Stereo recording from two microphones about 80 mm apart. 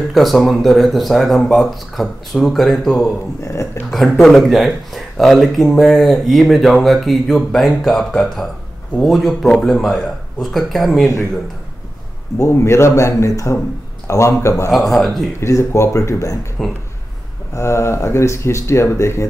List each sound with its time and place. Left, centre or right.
0.1 s speech: centre
3.4 s speech: left
3.9 s speech: centre
12.4 s speech: left
14.7 s speech: centre
15.4 s speech: left
16.6 s speech: centre
17.6 s speech: left